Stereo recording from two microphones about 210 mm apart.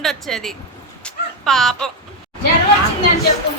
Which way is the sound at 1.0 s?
Centre (ahead or behind).